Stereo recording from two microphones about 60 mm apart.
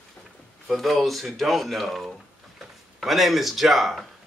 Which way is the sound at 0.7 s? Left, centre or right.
Centre.